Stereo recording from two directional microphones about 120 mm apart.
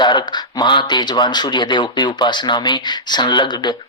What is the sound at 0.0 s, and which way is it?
Speech, 40° left (ahead or behind).